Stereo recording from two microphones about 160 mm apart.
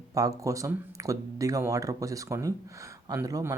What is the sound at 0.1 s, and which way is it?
Speech, 20° right (ahead or behind).